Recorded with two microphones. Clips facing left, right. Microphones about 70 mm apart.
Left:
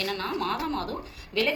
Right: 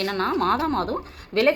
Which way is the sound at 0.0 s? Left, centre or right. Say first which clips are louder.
Right 7 dB; right.